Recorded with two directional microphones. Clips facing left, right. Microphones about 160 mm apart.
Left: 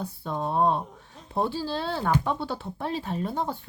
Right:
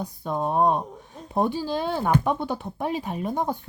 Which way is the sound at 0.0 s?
15° right (ahead or behind).